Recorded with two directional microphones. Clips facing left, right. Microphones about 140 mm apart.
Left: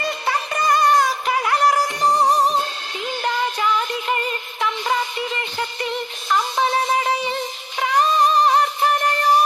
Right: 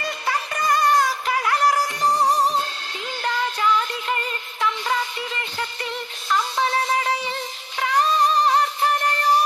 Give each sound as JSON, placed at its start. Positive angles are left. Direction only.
{"t": 0.0, "sound": "music", "side_deg": 25}